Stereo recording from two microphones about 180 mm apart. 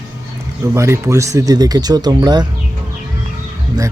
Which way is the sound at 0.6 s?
15° right (ahead or behind).